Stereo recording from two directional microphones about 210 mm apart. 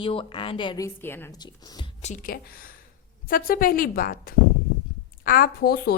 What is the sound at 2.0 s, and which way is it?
A woman's voice, 35° left (ahead or behind).